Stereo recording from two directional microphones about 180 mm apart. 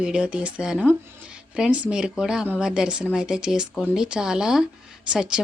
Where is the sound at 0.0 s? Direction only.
5° right (ahead or behind).